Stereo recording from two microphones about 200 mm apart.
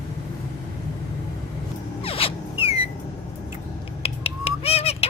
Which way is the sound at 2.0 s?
30° left (ahead or behind).